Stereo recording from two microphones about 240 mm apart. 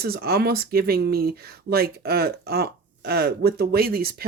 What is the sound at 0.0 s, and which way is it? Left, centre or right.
Speech, right.